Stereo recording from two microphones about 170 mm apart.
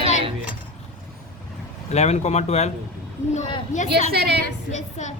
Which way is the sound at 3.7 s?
45° left (ahead or behind).